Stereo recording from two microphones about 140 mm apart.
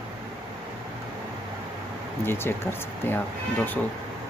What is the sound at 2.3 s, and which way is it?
Speech, 15° left (ahead or behind).